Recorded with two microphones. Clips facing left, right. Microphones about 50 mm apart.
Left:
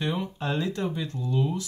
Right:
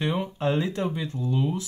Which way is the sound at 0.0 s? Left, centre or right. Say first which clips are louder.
Right 3 dB; centre.